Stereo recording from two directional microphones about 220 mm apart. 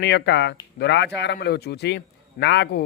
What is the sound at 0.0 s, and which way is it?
A man's voice, 50° left (ahead or behind).